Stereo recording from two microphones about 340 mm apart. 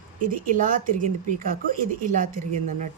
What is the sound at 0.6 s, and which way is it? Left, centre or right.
Speech, right.